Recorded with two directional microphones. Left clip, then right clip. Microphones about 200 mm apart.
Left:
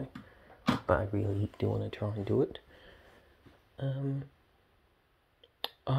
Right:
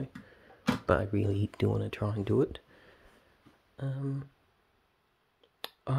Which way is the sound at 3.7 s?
15° right (ahead or behind).